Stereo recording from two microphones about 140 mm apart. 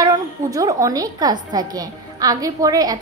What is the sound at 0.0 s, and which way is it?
A woman's voice, 25° right (ahead or behind).